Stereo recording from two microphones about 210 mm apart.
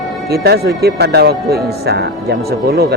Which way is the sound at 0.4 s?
50° right (ahead or behind).